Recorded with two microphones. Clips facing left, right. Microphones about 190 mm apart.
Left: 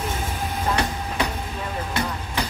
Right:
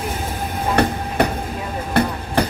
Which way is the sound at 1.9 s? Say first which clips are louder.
Right 11 dB; 55° right (ahead or behind).